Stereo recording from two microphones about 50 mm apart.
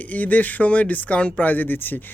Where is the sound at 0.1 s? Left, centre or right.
Left.